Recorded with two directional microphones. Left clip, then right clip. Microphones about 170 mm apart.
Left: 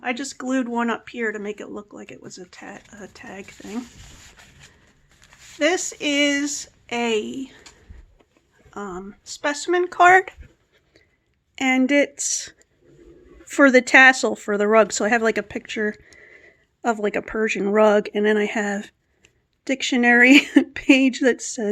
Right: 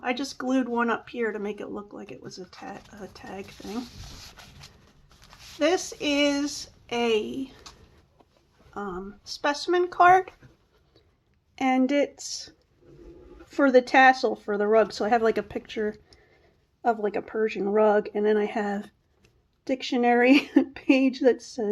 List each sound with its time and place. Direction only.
0.0 s speech: 35° left (ahead or behind)
4.0 s a sound: centre (ahead or behind)
5.5 s speech: 40° left (ahead or behind)
8.7 s speech: 45° left (ahead or behind)
11.5 s speech: 30° left (ahead or behind)